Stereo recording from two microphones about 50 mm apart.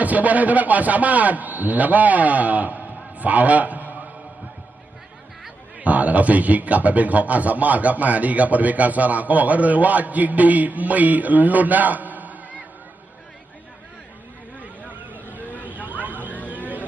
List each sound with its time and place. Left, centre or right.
0.0 s a man's voice: right
5.8 s a man's voice: right
14.9 s vehicle: right
15.6 s a sound: right
16.5 s vehicle: right